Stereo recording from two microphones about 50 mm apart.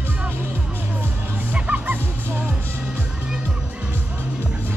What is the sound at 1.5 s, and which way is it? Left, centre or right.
Music, right.